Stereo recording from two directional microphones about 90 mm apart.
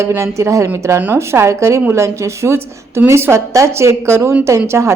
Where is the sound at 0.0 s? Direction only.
30° right (ahead or behind).